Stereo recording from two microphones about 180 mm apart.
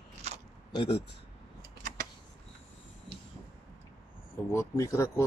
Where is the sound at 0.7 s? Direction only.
25° left (ahead or behind).